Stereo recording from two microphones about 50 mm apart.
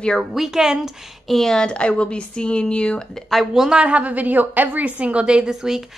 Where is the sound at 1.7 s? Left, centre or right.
Left.